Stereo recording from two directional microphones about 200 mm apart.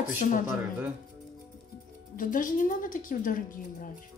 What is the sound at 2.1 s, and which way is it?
A woman's voice, 40° left (ahead or behind).